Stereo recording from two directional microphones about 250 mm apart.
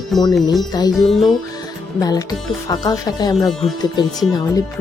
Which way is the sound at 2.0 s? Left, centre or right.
Centre.